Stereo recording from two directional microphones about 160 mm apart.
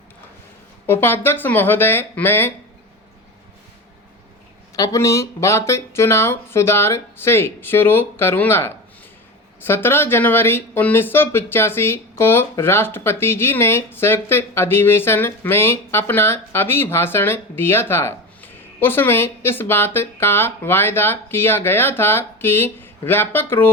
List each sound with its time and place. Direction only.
0.9 s speech: 15° left (ahead or behind)
4.8 s speech: 20° left (ahead or behind)